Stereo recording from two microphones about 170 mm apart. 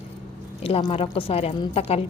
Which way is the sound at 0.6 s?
35° left (ahead or behind).